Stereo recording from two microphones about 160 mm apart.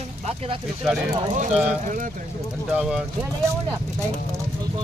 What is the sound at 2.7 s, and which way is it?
Speech, 5° right (ahead or behind).